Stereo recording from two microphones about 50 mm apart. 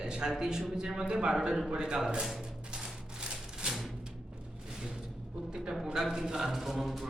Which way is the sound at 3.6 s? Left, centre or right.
Centre.